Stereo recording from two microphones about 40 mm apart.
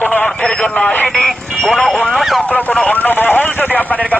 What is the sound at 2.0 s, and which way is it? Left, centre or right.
Speech, centre.